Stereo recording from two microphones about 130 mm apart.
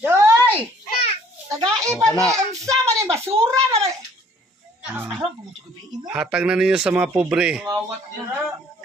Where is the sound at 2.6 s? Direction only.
25° right (ahead or behind).